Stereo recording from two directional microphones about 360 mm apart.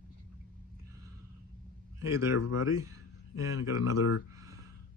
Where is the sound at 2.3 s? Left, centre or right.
Left.